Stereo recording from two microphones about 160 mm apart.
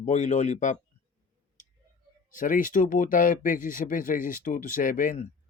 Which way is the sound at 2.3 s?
55° left (ahead or behind).